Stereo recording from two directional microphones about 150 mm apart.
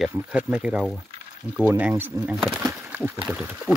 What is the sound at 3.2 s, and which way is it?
Speech, 10° right (ahead or behind).